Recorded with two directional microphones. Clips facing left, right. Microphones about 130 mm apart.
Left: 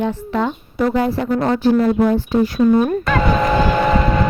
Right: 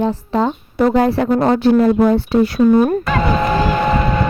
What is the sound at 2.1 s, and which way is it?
Speech, 75° right (ahead or behind).